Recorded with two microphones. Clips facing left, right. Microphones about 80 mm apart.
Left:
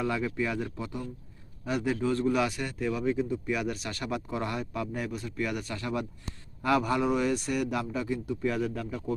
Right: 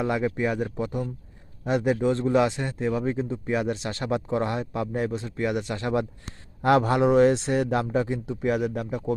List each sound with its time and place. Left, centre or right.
0.0 s a man's voice: right
6.6 s a man's voice: right
7.0 s a man's voice: right